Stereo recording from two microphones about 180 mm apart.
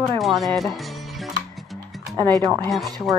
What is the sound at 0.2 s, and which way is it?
Speech, centre (ahead or behind).